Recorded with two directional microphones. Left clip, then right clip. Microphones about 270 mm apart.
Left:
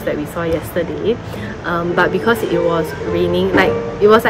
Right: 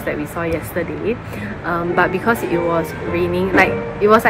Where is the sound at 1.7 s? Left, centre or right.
Centre.